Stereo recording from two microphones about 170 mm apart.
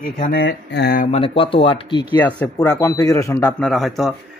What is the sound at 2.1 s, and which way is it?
A man's voice, 10° left (ahead or behind).